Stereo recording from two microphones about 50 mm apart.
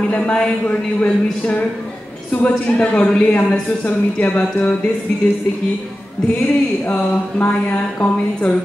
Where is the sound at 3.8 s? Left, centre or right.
Left.